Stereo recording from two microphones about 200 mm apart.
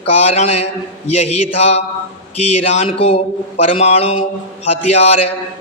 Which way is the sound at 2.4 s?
30° left (ahead or behind).